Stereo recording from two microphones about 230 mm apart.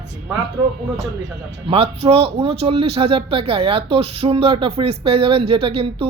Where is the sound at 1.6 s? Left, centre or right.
Right.